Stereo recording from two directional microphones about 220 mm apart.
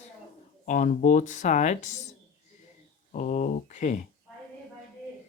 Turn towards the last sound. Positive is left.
turn(degrees=35)  # may be behind; listen again after turning